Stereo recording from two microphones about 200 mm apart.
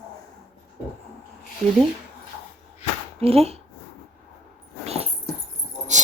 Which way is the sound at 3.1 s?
30° right (ahead or behind).